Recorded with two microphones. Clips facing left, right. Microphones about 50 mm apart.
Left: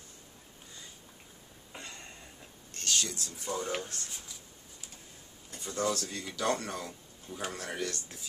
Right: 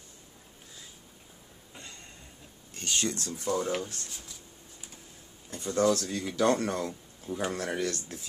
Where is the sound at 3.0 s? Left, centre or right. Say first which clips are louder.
Right 8 dB; right.